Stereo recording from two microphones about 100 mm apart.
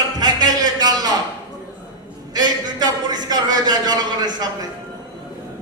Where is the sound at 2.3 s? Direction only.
45° right (ahead or behind).